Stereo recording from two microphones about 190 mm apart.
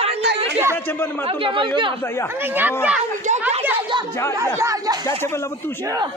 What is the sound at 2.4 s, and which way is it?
Speech, 10° right (ahead or behind).